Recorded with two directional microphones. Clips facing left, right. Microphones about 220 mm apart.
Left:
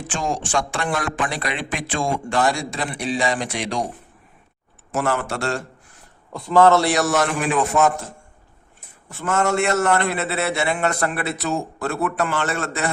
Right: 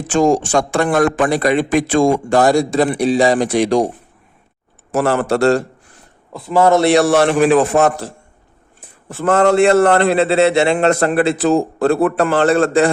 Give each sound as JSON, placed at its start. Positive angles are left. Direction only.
{"t": 0.1, "sound": "a man's voice", "side_deg": -40}
{"t": 4.9, "sound": "a man's voice", "side_deg": -35}
{"t": 6.3, "sound": "a man's voice", "side_deg": -5}
{"t": 6.8, "sound": "a man's voice", "side_deg": -30}
{"t": 9.3, "sound": "a man's voice", "side_deg": -30}